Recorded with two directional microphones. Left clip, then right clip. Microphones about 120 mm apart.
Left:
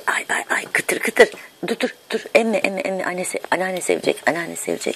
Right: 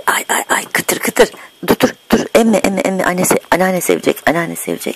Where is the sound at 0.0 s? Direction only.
65° right (ahead or behind).